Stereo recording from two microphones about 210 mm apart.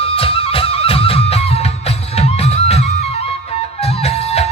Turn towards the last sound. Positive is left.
turn(degrees=30)  # may be behind; listen again after turning